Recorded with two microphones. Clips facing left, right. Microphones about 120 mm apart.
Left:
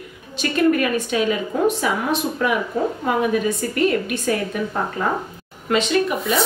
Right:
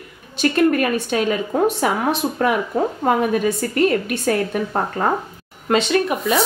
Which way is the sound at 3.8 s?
45° right (ahead or behind).